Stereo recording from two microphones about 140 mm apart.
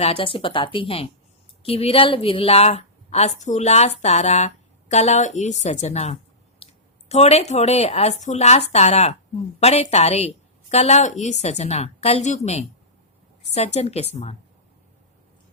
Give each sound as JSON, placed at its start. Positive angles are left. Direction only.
{"t": 0.0, "sound": "a woman's voice", "side_deg": 40}
{"t": 6.6, "sound": "a sound", "side_deg": 45}
{"t": 7.1, "sound": "a woman's voice", "side_deg": 50}
{"t": 13.5, "sound": "a woman's voice", "side_deg": 50}